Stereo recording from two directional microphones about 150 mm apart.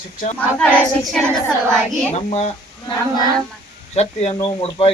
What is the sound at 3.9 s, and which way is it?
Speech, 45° left (ahead or behind).